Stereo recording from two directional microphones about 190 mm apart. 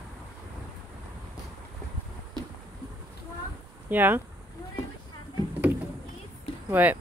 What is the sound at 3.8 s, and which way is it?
Speech, 10° right (ahead or behind).